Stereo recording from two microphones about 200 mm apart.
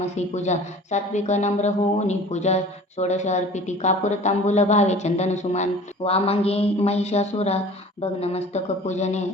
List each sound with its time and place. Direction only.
0.0 s speech: 35° left (ahead or behind)